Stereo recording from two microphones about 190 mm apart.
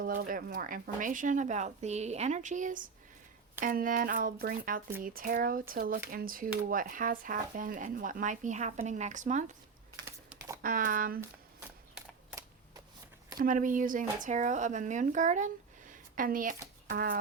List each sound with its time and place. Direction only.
0.0 s speech: 50° right (ahead or behind)
10.6 s speech: 45° right (ahead or behind)
11.9 s a sound: 15° right (ahead or behind)
13.4 s speech: 45° right (ahead or behind)